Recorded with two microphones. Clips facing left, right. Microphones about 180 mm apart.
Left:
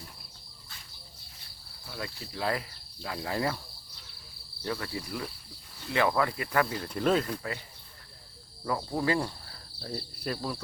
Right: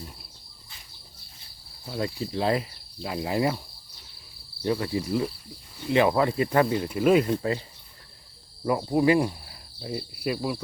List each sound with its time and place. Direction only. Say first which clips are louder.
1.8 s cricket: right 10 dB; 25° right (ahead or behind)
4.6 s cricket: right 8 dB; 20° right (ahead or behind)
6.8 s speech: right 6 dB; 10° right (ahead or behind)
7.3 s cricket: right 9 dB; 25° right (ahead or behind)
8.6 s cricket: right 8 dB; 15° right (ahead or behind)